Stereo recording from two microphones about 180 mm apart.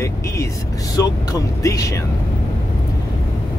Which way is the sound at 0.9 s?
20° left (ahead or behind).